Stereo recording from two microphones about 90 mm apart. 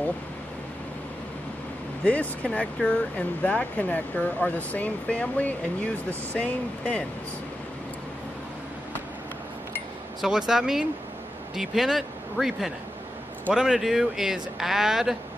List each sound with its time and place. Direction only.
2.0 s speech: 15° left (ahead or behind)
10.2 s speech: 5° right (ahead or behind)